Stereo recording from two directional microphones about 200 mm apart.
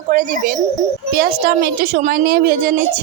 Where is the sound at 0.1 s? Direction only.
40° right (ahead or behind).